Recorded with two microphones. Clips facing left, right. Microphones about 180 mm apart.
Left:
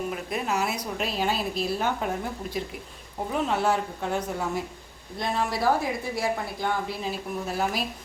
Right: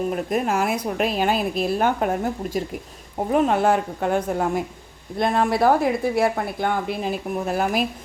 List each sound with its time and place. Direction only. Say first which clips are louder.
0.1 s a woman's voice: right 6 dB; 50° right (ahead or behind)